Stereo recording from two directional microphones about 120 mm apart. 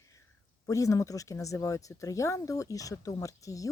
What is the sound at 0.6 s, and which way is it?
Speech, 30° left (ahead or behind).